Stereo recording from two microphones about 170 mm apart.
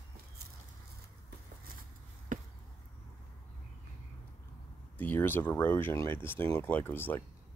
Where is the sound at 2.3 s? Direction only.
50° right (ahead or behind).